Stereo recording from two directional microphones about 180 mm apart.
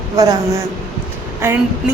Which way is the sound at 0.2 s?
20° right (ahead or behind).